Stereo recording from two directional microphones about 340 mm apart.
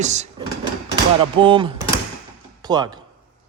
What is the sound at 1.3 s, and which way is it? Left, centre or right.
A man's voice, centre.